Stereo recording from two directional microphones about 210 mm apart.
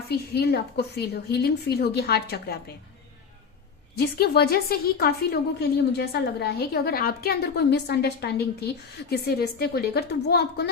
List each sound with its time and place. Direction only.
0.1 s a woman's voice: 50° left (ahead or behind)
3.9 s a woman's voice: 45° left (ahead or behind)